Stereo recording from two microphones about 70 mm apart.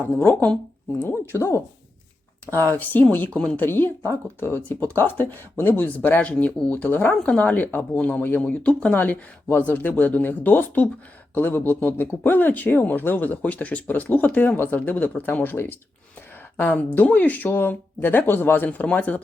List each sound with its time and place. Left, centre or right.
0.0 s speech: left
1.0 s speech: left
2.7 s speech: left
3.3 s speech: centre
3.7 s speech: left